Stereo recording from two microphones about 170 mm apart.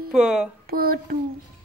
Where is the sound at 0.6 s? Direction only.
60° right (ahead or behind).